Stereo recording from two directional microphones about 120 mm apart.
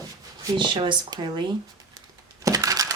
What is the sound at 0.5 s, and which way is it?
Speech, 40° right (ahead or behind).